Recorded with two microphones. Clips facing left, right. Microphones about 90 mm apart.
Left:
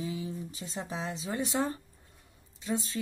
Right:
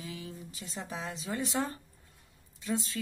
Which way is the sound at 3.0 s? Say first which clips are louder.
Left 3 dB; 25° left (ahead or behind).